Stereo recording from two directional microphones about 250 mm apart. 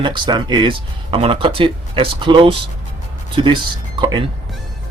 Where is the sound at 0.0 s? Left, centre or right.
Centre.